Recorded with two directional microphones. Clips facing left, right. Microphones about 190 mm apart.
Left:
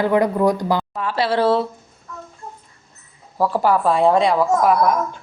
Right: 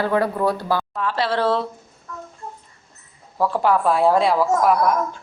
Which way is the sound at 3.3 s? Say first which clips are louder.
Left 1 dB; 5° left (ahead or behind).